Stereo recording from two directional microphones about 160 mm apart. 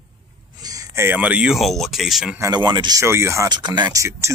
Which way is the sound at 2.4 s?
25° right (ahead or behind).